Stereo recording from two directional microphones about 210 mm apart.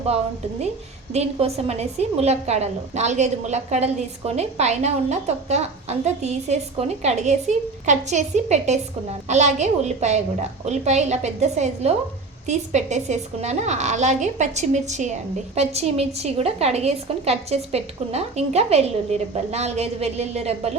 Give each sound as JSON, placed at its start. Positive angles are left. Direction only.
{"t": 1.1, "sound": "a woman's voice", "side_deg": -30}